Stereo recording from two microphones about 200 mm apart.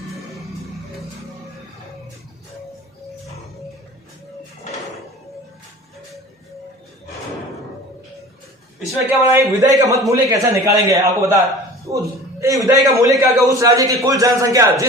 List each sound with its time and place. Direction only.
9.0 s a man's voice: 10° right (ahead or behind)